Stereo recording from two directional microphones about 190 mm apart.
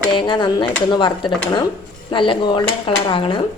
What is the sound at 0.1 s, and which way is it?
Speech, 25° left (ahead or behind).